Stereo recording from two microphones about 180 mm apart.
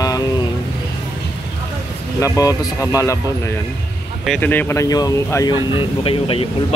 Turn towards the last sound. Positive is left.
turn(degrees=30)  # may be behind; listen again after turning